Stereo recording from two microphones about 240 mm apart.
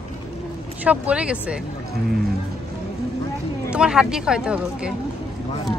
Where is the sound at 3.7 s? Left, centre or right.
Centre.